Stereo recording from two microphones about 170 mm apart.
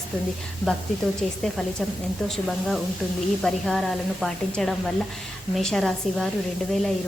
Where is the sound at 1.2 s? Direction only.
Centre (ahead or behind).